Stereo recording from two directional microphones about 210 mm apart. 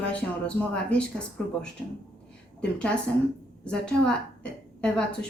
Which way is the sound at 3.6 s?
5° left (ahead or behind).